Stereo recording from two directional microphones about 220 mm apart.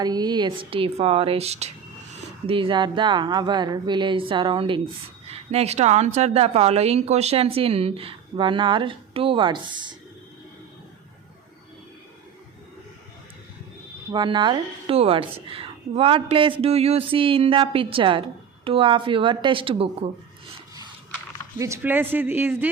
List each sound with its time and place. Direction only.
0.0 s a woman's voice: 20° right (ahead or behind)
14.1 s a woman's voice: 20° right (ahead or behind)
21.6 s speech: 10° right (ahead or behind)